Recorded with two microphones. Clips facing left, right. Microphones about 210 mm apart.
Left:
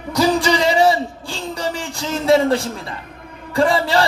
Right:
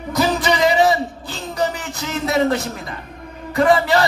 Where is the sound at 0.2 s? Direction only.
30° left (ahead or behind).